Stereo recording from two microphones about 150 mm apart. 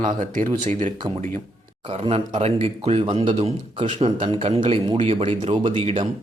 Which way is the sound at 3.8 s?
55° right (ahead or behind).